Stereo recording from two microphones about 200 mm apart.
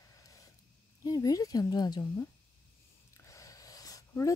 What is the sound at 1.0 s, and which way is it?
A woman's voice, 20° left (ahead or behind).